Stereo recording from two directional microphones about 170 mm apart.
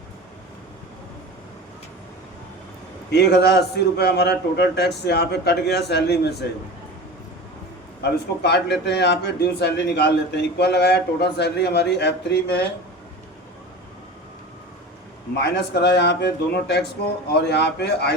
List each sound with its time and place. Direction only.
3.1 s a man's voice: 75° left (ahead or behind)
8.4 s a man's voice: 75° left (ahead or behind)
15.4 s a man's voice: 80° left